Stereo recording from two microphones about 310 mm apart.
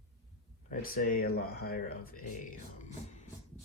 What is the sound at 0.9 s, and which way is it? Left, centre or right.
Speech, left.